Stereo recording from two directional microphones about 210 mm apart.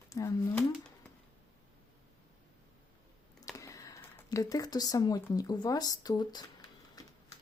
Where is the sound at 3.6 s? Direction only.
15° left (ahead or behind).